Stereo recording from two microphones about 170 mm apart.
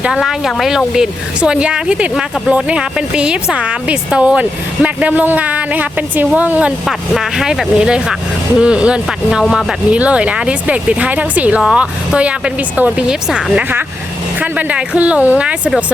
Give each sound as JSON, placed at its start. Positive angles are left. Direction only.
{"t": 0.0, "sound": "speech", "side_deg": -5}